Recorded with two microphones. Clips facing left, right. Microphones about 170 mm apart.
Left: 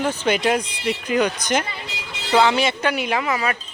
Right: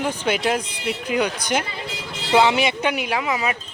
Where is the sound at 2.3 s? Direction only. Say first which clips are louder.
Even; 20° right (ahead or behind).